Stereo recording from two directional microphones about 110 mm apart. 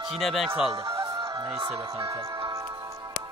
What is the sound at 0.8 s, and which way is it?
Music, 35° right (ahead or behind).